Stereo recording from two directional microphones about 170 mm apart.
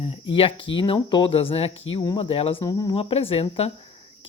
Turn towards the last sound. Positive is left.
turn(degrees=35)  # may be behind; listen again after turning